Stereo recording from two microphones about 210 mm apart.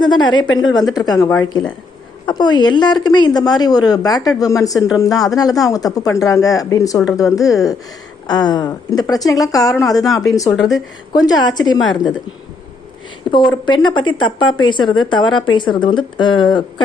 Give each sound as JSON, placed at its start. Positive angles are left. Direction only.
{"t": 0.0, "sound": "speech", "side_deg": 20}
{"t": 0.4, "sound": "speech", "side_deg": 70}
{"t": 0.7, "sound": "speech", "side_deg": 20}
{"t": 10.5, "sound": "speech", "side_deg": 0}
{"t": 11.1, "sound": "speech", "side_deg": 20}
{"t": 13.3, "sound": "speech", "side_deg": 20}